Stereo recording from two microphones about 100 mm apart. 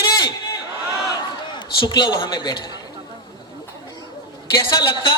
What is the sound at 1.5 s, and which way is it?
A man's voice, 50° left (ahead or behind).